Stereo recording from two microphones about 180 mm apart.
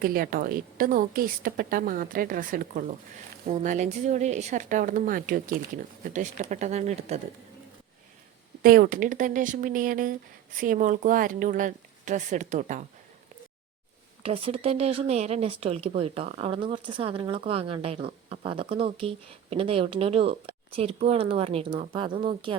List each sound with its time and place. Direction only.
0.0 s speech: 55° right (ahead or behind); by 7.2 s 40° right (ahead or behind)
8.6 s speech: 55° right (ahead or behind)
14.2 s a woman's voice: 30° right (ahead or behind)